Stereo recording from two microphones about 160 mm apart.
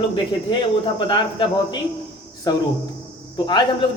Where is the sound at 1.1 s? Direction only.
30° left (ahead or behind).